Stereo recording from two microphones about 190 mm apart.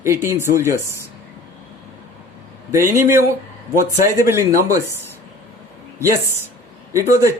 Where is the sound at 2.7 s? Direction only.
15° right (ahead or behind).